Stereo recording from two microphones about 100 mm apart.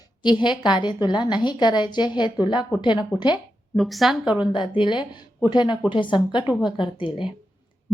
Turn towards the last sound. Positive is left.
turn(degrees=60)  # may be behind; listen again after turning